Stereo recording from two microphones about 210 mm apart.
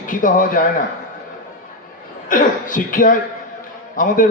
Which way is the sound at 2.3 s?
40° left (ahead or behind).